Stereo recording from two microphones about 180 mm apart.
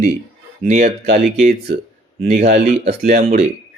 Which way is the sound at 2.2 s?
40° right (ahead or behind).